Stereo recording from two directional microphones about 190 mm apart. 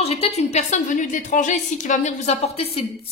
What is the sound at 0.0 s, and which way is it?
A woman's voice, 35° left (ahead or behind).